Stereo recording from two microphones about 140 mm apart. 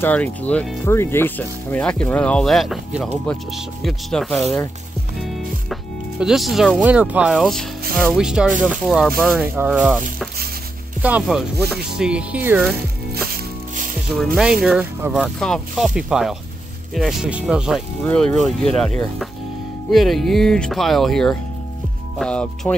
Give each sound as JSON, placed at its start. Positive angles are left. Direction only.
{"t": 0.0, "sound": "speech", "side_deg": 10}
{"t": 13.1, "sound": "music", "side_deg": -90}
{"t": 14.1, "sound": "speech", "side_deg": 0}
{"t": 15.2, "sound": "speech", "side_deg": 5}
{"t": 19.9, "sound": "speech", "side_deg": 0}